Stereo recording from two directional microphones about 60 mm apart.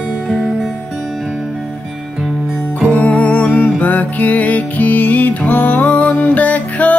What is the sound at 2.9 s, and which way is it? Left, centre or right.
Music, left.